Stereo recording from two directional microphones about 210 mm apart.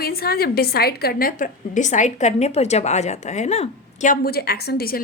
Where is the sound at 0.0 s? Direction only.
45° left (ahead or behind).